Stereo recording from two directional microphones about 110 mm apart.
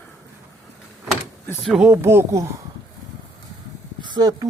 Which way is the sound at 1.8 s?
20° right (ahead or behind).